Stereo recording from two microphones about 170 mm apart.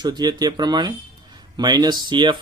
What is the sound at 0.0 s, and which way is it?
Speech, 25° right (ahead or behind).